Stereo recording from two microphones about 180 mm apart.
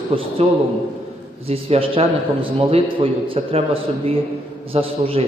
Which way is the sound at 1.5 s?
30° right (ahead or behind).